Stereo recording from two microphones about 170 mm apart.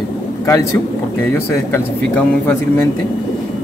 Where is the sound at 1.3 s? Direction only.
15° left (ahead or behind).